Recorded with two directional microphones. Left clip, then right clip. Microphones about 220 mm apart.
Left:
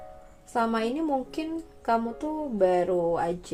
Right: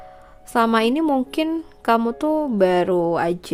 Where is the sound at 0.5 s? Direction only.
40° right (ahead or behind).